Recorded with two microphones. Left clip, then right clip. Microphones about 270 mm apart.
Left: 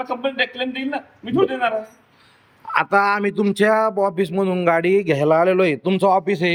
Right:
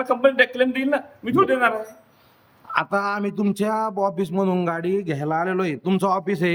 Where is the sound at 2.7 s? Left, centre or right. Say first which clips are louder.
Left 5 dB; centre.